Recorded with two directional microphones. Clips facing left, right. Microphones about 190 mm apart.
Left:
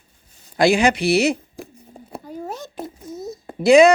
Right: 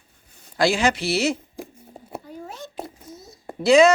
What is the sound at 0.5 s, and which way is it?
Speech, 15° left (ahead or behind).